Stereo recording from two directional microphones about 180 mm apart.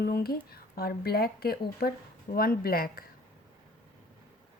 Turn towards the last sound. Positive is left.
turn(degrees=55)  # may be behind; listen again after turning